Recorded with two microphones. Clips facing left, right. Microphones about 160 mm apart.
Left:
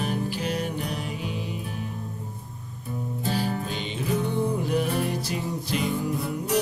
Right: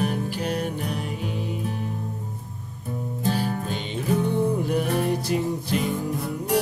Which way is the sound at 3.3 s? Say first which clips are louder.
Right 1 dB; 55° right (ahead or behind).